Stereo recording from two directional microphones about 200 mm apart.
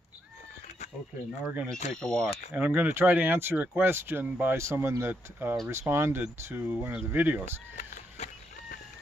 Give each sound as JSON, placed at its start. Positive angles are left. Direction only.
{"t": 1.4, "sound": "speech", "side_deg": -10}
{"t": 2.0, "sound": "speech", "side_deg": 5}
{"t": 2.5, "sound": "speech", "side_deg": -10}
{"t": 7.7, "sound": "a sound", "side_deg": 45}